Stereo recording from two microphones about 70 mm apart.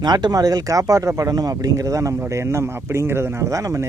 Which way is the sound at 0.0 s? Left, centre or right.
Right.